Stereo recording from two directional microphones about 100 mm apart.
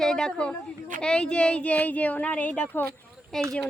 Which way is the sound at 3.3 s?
5° left (ahead or behind).